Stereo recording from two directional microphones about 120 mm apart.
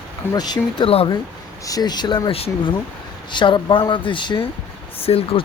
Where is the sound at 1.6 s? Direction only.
35° left (ahead or behind).